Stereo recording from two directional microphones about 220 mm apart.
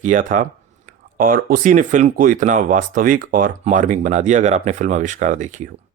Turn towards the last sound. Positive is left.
turn(degrees=-35)  # may be behind; listen again after turning